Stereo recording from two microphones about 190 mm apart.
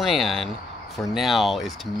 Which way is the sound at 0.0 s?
Centre (ahead or behind).